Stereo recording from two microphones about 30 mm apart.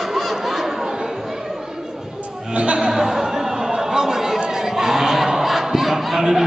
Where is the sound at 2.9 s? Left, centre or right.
Centre.